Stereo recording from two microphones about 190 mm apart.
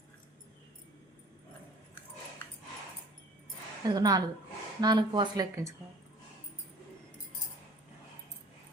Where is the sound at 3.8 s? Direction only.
20° right (ahead or behind).